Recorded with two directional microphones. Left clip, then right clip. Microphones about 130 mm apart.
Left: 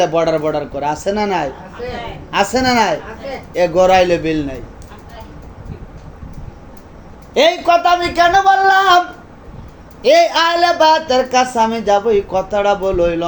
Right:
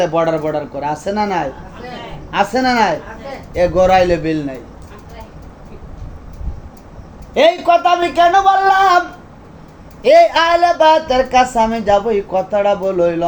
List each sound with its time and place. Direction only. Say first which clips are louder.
0.0 s speech: left 1 dB; 35° left (ahead or behind)
7.3 s speech: right 1 dB; 30° left (ahead or behind)